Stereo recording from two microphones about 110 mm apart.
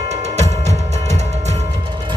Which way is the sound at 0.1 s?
90° right.